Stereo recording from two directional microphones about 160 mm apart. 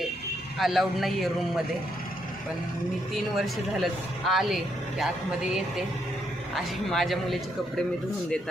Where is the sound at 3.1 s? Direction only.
Centre (ahead or behind).